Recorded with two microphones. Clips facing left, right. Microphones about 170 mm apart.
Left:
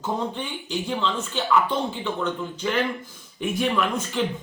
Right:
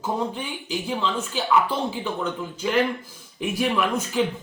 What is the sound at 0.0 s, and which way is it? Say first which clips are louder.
Speech: right 1 dB; 10° right (ahead or behind).